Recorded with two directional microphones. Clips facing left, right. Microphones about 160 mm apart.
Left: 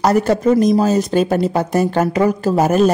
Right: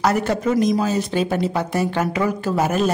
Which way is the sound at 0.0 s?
40° left (ahead or behind).